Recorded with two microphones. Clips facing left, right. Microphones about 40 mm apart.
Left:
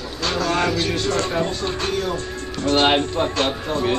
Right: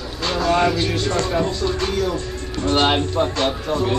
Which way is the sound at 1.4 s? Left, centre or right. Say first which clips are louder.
Right 2 dB; left.